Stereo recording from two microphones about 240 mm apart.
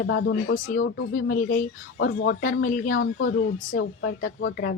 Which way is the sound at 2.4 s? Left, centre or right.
Left.